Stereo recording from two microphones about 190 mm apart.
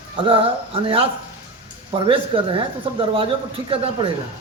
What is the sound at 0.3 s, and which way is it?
Speech, 30° right (ahead or behind).